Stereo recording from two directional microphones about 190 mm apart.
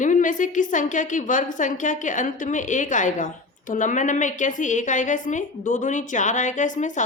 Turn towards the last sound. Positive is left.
turn(degrees=40)  # may be behind; listen again after turning